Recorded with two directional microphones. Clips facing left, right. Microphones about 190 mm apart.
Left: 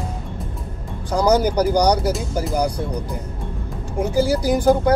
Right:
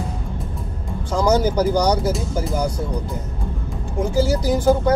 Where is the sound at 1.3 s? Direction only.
15° left (ahead or behind).